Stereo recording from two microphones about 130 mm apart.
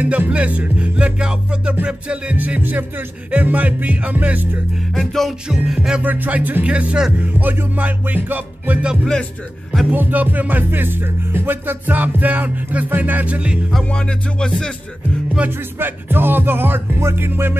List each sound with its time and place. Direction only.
0.0 s music: 10° right (ahead or behind)
4.9 s music: centre (ahead or behind)
15.3 s music: 15° right (ahead or behind)